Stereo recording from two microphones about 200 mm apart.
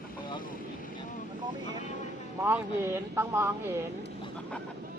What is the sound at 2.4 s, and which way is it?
Speech, 10° right (ahead or behind).